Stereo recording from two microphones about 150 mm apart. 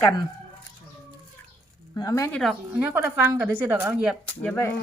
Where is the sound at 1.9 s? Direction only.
20° left (ahead or behind).